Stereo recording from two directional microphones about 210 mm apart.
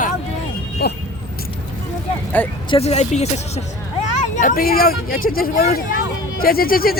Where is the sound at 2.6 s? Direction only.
30° left (ahead or behind).